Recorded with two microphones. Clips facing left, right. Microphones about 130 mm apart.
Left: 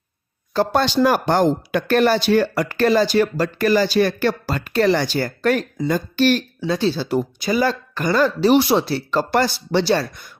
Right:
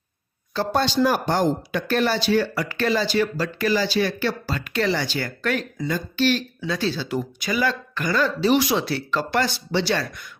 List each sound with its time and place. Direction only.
0.7 s speech: 70° left (ahead or behind); by 6.4 s 50° left (ahead or behind)
6.6 s speech: 30° left (ahead or behind)